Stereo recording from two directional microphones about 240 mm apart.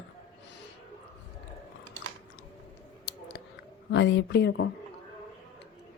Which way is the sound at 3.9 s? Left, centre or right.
Left.